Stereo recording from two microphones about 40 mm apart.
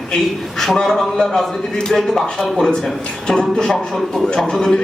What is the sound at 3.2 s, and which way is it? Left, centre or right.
Speech, centre.